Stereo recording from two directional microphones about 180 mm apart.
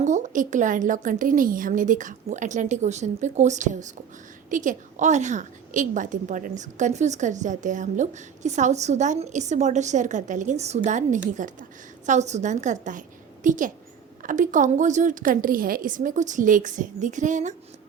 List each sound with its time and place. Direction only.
0.0 s a woman's voice: 45° right (ahead or behind)